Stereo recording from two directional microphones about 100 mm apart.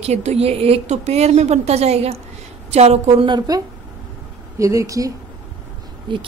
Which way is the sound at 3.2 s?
45° right (ahead or behind).